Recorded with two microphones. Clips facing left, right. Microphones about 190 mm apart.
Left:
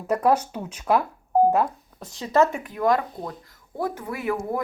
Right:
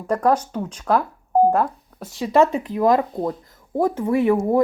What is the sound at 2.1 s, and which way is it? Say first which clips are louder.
Speech: right 4 dB; 15° right (ahead or behind).